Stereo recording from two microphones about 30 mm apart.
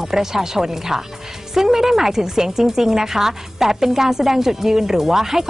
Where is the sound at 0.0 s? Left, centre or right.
Centre.